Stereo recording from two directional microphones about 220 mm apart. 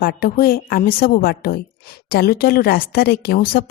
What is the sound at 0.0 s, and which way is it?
A woman's voice, 45° left (ahead or behind).